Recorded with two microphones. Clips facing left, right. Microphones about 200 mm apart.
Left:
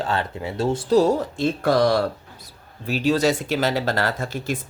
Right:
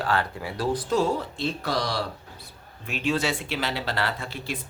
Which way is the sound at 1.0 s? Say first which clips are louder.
Left 6 dB; 45° left (ahead or behind).